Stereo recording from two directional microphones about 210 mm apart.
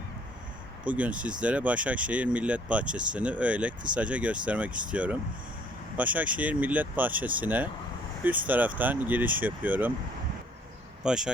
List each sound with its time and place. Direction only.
0.9 s speech: 5° right (ahead or behind)
11.0 s speech: 5° right (ahead or behind)